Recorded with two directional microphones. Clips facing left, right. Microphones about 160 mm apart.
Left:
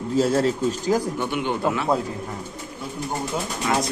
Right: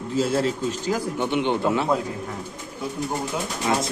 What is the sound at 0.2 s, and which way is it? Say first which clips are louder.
Speech: left 2 dB; 40° left (ahead or behind).